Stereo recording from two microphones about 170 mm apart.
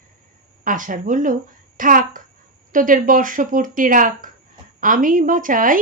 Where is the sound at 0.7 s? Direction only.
50° right (ahead or behind).